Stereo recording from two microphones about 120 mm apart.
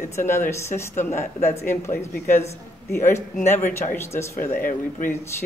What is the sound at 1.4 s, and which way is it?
Speech, 65° left (ahead or behind).